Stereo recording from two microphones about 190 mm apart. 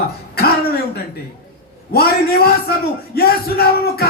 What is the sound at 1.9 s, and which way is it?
A man's voice, 55° left (ahead or behind).